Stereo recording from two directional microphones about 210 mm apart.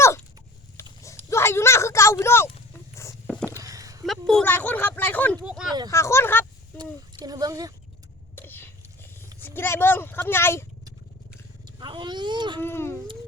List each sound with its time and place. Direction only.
0.8 s clip-clop: 10° left (ahead or behind)
1.3 s a sound: 10° left (ahead or behind)
3.6 s a sound: 15° right (ahead or behind)
4.0 s speech: centre (ahead or behind)
5.5 s speech: 5° right (ahead or behind)
5.9 s speech: 15° left (ahead or behind)
7.3 s speech: 15° right (ahead or behind)
8.4 s a sound: 10° left (ahead or behind)
9.4 s speech: 10° left (ahead or behind)
11.8 s a child's voice: 20° right (ahead or behind)
12.6 s a child's voice: 10° left (ahead or behind)